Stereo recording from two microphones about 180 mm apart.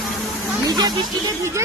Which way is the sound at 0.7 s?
20° right (ahead or behind).